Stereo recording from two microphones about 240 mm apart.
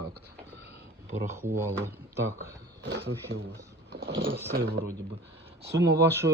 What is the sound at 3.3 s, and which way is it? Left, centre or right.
Speech, right.